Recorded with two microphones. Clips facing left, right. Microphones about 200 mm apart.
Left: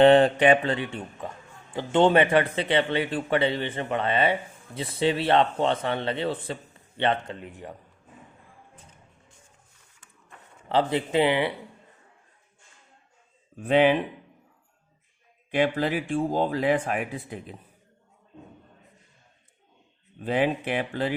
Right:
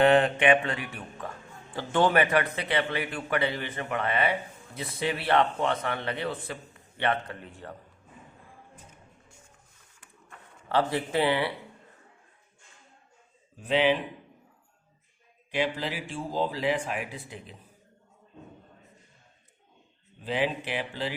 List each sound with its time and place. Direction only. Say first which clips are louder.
0.0 s speech: left 5 dB; 30° left (ahead or behind); by 7.8 s 15° left (ahead or behind)
10.7 s speech: left 3 dB; 20° left (ahead or behind)
13.6 s speech: left 5 dB; 55° left (ahead or behind)
15.5 s speech: left 6 dB; 55° left (ahead or behind)
20.2 s speech: left 4 dB; 50° left (ahead or behind)